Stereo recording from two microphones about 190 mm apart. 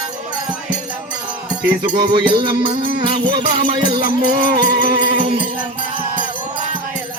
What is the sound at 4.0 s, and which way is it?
Music, 50° right (ahead or behind).